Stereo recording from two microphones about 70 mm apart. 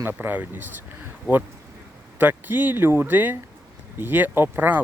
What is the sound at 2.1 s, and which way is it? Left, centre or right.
Speech, right.